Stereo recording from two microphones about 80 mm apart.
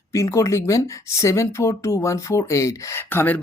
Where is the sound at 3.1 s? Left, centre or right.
Left.